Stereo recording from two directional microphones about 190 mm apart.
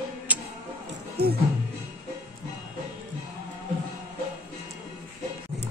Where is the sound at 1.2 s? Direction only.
60° right (ahead or behind).